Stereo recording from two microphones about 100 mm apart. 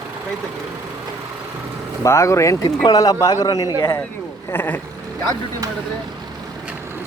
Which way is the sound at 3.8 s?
25° left (ahead or behind).